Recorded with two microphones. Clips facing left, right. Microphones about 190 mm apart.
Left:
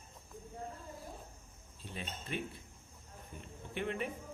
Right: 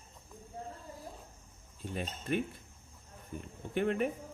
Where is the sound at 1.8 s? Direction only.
50° right (ahead or behind).